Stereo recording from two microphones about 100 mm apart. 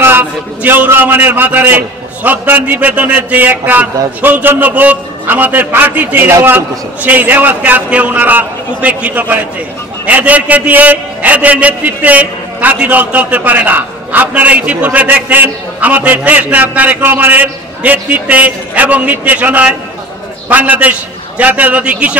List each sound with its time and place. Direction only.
0.0 s a man's voice: 20° right (ahead or behind)